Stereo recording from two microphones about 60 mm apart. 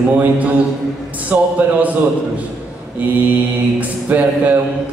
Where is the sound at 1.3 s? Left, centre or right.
Right.